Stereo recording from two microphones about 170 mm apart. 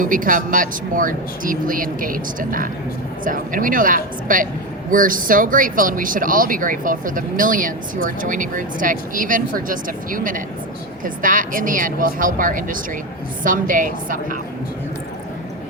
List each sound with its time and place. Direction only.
0.0 s speech: 55° right (ahead or behind)